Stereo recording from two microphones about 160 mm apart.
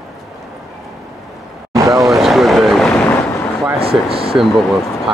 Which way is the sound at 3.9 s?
35° right (ahead or behind).